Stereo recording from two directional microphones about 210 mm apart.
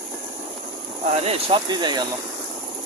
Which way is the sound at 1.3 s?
25° right (ahead or behind).